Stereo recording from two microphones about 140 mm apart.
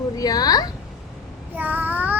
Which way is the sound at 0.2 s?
25° left (ahead or behind).